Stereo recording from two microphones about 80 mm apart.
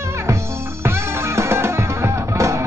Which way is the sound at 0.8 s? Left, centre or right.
Right.